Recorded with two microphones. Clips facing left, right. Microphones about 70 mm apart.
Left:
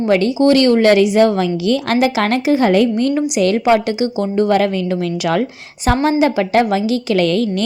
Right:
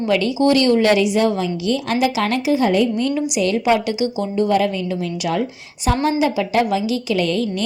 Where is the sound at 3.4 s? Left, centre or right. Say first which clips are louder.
Left 4 dB; left.